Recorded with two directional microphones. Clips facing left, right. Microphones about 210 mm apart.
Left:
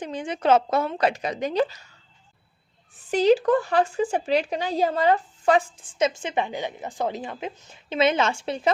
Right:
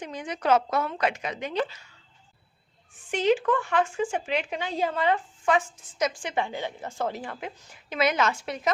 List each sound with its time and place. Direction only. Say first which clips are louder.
0.0 s a woman's voice: left 4 dB; 30° left (ahead or behind)
3.1 s speech: left 5 dB; 35° left (ahead or behind)